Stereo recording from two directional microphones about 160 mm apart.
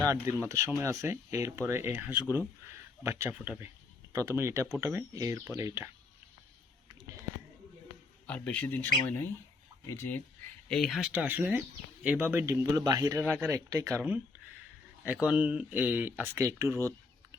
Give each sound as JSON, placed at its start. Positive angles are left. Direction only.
{"t": 0.0, "sound": "speech", "side_deg": -20}
{"t": 8.3, "sound": "speech", "side_deg": 10}
{"t": 10.7, "sound": "speech", "side_deg": 5}
{"t": 11.1, "sound": "speech", "side_deg": -10}
{"t": 15.0, "sound": "speech", "side_deg": -10}